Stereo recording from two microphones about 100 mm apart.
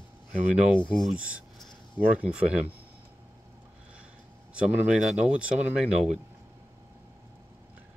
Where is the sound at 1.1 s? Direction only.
10° right (ahead or behind).